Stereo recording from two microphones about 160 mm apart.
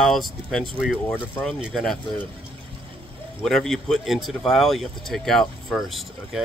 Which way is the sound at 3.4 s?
Centre (ahead or behind).